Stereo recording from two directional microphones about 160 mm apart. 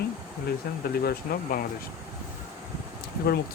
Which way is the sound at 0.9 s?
65° left (ahead or behind).